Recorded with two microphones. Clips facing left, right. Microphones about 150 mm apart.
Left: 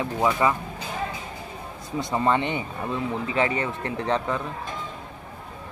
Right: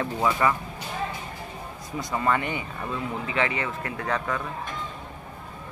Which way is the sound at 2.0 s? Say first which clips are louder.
Left 3 dB; 25° left (ahead or behind).